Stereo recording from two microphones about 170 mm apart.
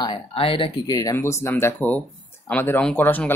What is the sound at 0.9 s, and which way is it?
Speech, 20° left (ahead or behind).